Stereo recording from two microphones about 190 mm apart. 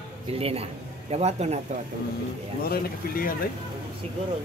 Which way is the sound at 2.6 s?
50° left (ahead or behind).